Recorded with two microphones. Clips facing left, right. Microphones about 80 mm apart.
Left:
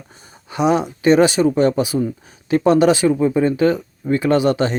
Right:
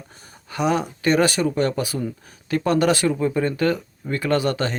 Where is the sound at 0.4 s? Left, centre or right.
Centre.